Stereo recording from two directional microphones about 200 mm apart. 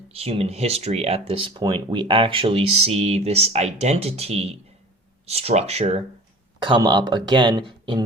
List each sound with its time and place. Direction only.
0.1 s speech: 30° right (ahead or behind)